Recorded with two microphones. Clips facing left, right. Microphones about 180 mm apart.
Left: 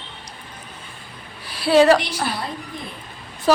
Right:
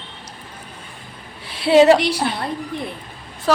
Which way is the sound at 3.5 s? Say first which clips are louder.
Left 1 dB; 5° left (ahead or behind).